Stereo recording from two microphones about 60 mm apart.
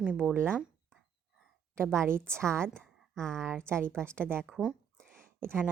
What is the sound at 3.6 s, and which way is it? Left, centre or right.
Speech, right.